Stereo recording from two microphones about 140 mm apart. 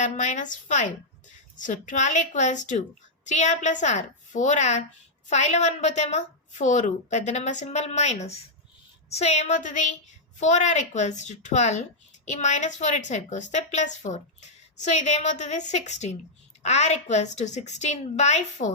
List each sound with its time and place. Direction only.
0.0 s a woman's voice: 60° left (ahead or behind)